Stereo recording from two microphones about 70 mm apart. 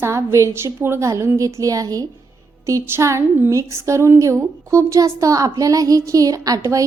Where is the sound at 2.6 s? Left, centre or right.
Right.